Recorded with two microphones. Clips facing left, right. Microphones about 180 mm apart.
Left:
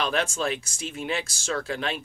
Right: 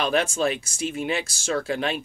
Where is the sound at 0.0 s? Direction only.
10° right (ahead or behind).